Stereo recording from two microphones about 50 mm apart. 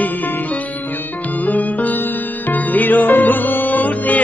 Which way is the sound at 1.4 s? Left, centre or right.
Left.